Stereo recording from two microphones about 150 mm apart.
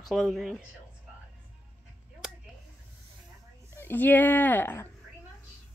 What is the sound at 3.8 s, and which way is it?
Speech, 15° left (ahead or behind).